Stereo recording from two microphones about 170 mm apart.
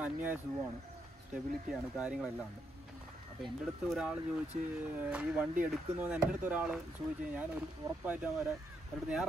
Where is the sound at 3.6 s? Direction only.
Centre (ahead or behind).